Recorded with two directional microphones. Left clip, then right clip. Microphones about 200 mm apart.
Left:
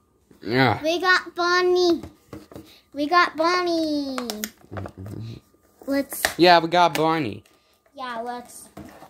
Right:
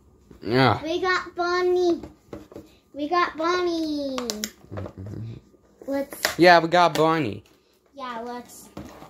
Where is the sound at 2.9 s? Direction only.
70° left (ahead or behind); by 4.1 s 50° left (ahead or behind).